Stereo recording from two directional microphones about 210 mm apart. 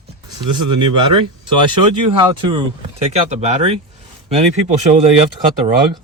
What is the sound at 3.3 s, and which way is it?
Speech, 30° right (ahead or behind).